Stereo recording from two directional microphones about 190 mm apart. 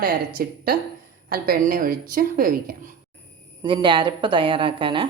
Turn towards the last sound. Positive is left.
turn(degrees=-25)  # may be behind; listen again after turning